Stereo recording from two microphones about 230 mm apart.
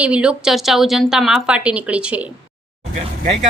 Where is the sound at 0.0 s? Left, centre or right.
Centre.